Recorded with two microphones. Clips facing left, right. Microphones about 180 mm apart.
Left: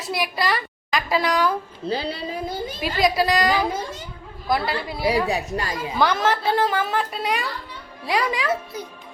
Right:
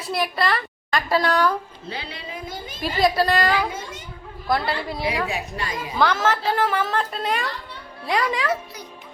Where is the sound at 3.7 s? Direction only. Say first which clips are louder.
Left 5 dB; 35° left (ahead or behind).